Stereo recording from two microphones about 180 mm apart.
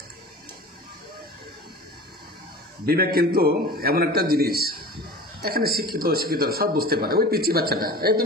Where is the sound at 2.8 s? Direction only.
55° right (ahead or behind).